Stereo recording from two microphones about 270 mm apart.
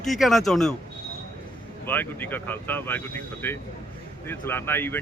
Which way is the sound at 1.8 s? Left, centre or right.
Centre.